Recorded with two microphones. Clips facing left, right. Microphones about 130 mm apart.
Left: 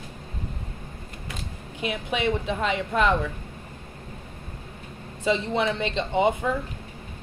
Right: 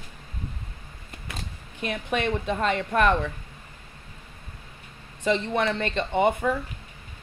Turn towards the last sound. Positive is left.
turn(degrees=15)  # may be behind; listen again after turning